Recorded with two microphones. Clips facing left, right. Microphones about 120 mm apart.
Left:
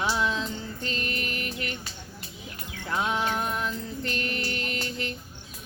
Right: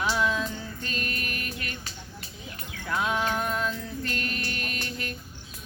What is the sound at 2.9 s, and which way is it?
Music, 25° left (ahead or behind).